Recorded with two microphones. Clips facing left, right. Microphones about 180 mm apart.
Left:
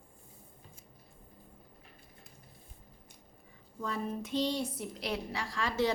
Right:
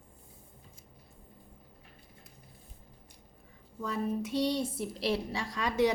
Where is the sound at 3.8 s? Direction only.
5° right (ahead or behind).